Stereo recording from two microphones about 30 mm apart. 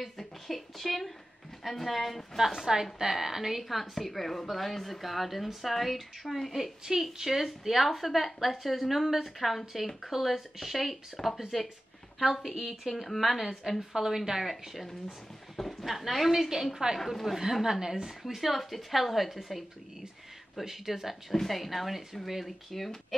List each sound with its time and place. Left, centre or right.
0.0 s a woman's voice: centre
2.3 s a woman's voice: centre
3.6 s a woman's voice: centre
6.5 s a woman's voice: centre
12.4 s a woman's voice: centre
16.7 s a woman's voice: centre
17.0 s a woman's voice: centre
17.4 s a woman's voice: centre
18.2 s a woman's voice: centre
20.6 s a woman's voice: centre
21.3 s a woman's voice: centre